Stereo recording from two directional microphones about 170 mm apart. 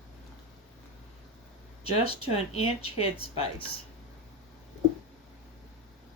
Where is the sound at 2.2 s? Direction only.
35° left (ahead or behind).